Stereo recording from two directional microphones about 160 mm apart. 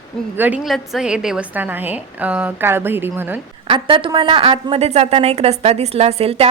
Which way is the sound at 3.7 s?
30° right (ahead or behind).